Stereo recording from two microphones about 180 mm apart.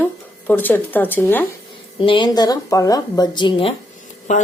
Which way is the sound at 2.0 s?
25° left (ahead or behind).